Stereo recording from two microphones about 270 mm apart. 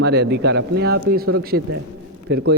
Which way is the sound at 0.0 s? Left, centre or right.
Right.